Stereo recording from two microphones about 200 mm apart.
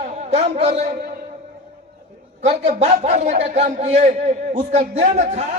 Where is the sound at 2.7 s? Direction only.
35° right (ahead or behind).